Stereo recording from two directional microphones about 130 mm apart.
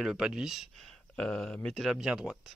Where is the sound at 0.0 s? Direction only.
5° right (ahead or behind).